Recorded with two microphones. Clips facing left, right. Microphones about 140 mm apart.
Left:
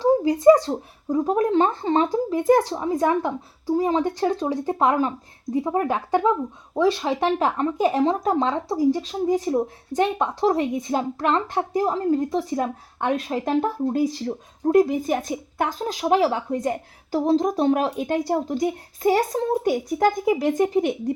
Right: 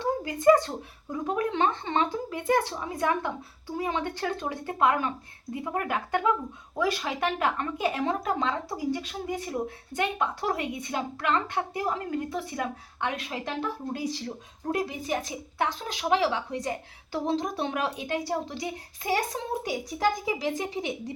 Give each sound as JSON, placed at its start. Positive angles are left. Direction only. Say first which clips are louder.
{"t": 0.0, "sound": "a woman's voice", "louder": "left 8 dB", "side_deg": 35}